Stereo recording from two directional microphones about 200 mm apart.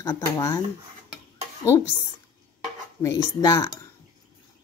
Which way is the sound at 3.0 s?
15° left (ahead or behind).